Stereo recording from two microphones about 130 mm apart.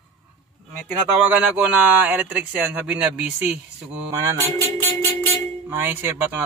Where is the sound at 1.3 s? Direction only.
10° right (ahead or behind).